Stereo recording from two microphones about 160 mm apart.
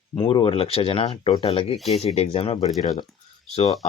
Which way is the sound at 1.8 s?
Centre (ahead or behind).